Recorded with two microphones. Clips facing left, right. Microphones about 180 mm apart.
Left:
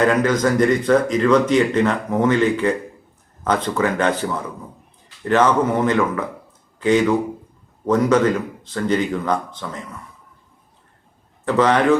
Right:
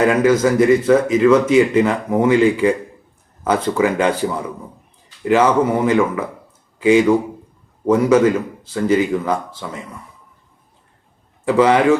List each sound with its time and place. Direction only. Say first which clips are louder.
0.0 s speech: right 3 dB; 10° right (ahead or behind)
11.4 s speech: right 3 dB; 10° right (ahead or behind)